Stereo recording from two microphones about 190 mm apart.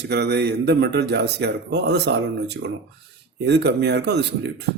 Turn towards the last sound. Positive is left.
turn(degrees=-65)  # may be behind; listen again after turning